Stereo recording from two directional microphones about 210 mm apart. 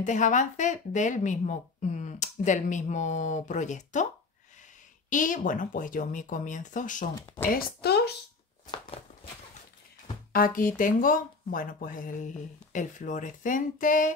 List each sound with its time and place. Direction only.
0.0 s speech: 35° left (ahead or behind)
5.1 s speech: 40° left (ahead or behind)
8.6 s a sound: 25° left (ahead or behind)
10.3 s speech: 40° left (ahead or behind)